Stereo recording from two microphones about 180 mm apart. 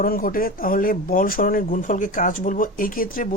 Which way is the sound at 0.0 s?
50° left (ahead or behind).